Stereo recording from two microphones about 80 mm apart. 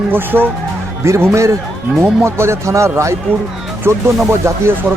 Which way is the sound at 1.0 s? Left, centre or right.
Right.